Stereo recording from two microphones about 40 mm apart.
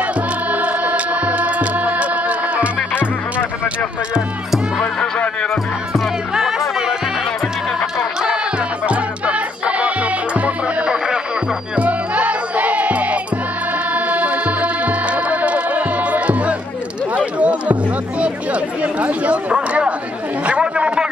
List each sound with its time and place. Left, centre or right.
0.0 s music: right
4.7 s music: centre
5.9 s music: centre
8.8 s music: right
17.1 s a sound: right
18.2 s chatter: right
20.4 s a sound: right